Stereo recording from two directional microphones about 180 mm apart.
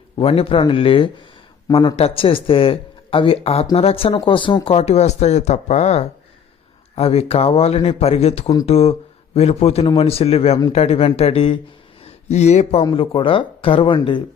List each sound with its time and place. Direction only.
0.2 s speech: 30° left (ahead or behind)
12.8 s speech: 25° left (ahead or behind)